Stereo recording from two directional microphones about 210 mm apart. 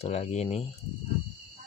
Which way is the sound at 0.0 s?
30° left (ahead or behind).